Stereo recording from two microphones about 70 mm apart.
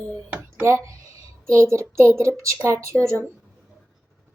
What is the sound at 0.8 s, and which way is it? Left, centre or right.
Speech, right.